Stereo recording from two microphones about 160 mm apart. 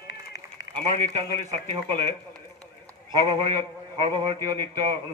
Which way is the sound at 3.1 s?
30° right (ahead or behind).